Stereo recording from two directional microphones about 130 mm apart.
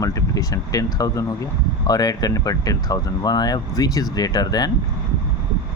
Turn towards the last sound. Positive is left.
turn(degrees=30)  # may be behind; listen again after turning